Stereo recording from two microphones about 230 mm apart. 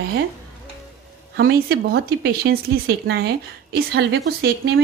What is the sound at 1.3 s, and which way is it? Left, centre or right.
Speech, right.